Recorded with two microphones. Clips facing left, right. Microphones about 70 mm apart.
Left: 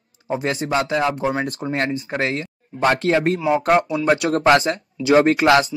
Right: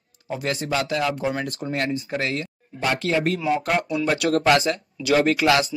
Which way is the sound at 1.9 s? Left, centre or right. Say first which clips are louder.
Left 3 dB; left.